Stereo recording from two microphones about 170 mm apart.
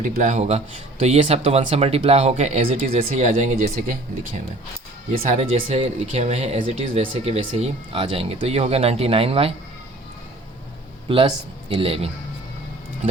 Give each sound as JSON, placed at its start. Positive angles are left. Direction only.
{"t": 0.0, "sound": "speech", "side_deg": -45}
{"t": 3.0, "sound": "speech", "side_deg": -45}
{"t": 5.3, "sound": "speech", "side_deg": -40}
{"t": 11.1, "sound": "speech", "side_deg": -30}